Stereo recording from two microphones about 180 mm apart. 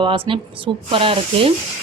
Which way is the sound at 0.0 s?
30° right (ahead or behind).